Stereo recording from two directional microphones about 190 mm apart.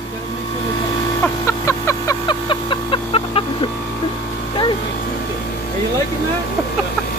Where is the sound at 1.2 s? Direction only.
15° left (ahead or behind).